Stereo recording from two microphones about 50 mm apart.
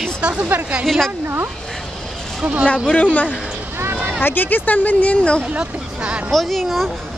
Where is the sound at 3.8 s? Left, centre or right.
Right.